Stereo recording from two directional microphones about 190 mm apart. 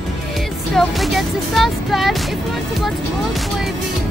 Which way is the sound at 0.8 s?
Centre (ahead or behind).